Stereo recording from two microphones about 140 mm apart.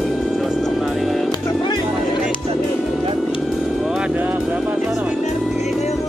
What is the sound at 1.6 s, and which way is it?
Music, 30° left (ahead or behind).